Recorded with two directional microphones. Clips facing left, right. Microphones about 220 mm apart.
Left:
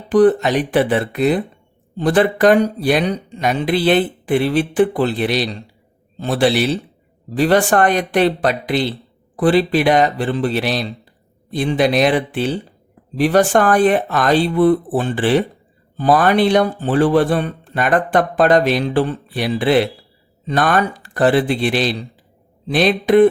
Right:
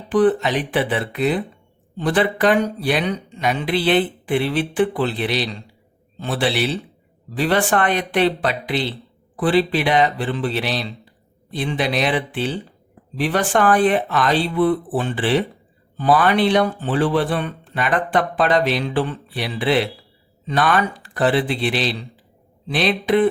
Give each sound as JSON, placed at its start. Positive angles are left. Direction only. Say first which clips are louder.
{"t": 0.1, "sound": "speech", "louder": "left 4 dB", "side_deg": 40}